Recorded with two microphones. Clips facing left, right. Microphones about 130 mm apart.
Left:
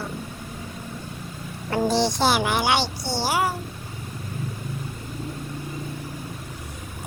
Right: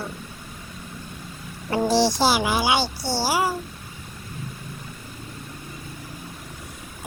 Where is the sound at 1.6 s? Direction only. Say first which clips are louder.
Right 1 dB; 10° right (ahead or behind).